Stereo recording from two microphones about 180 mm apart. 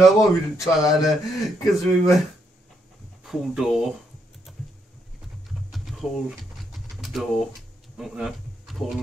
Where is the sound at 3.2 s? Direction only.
Centre (ahead or behind).